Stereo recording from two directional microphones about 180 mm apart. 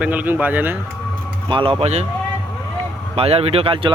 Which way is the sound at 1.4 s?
30° right (ahead or behind).